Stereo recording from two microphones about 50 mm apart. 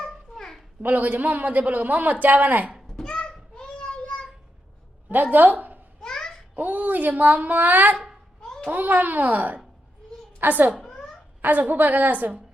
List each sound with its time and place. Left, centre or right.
0.0 s babbling: centre
0.8 s a man's voice: right
2.9 s a sound: centre
5.1 s a woman's voice: right
6.0 s babbling: centre
6.5 s a man's voice: right
8.4 s a sound: centre
8.7 s a man's voice: right